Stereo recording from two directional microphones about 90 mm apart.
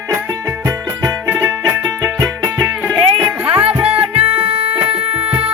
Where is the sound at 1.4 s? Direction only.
40° right (ahead or behind).